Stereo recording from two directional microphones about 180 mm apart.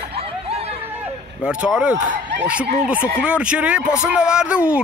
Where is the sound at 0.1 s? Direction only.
35° right (ahead or behind).